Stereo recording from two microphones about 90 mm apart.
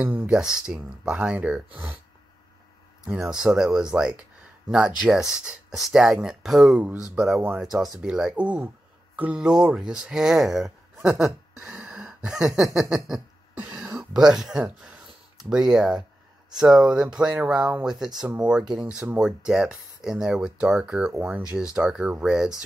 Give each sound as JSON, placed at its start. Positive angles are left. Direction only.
{"t": 0.0, "sound": "speech", "side_deg": -20}
{"t": 0.3, "sound": "speech", "side_deg": -10}
{"t": 3.1, "sound": "speech", "side_deg": -10}
{"t": 11.6, "sound": "a sound", "side_deg": -10}
{"t": 13.6, "sound": "throat clearing", "side_deg": -15}
{"t": 14.2, "sound": "speech", "side_deg": -5}